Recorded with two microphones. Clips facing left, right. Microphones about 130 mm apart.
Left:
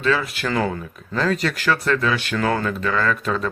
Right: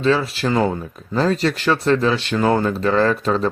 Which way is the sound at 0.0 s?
30° right (ahead or behind).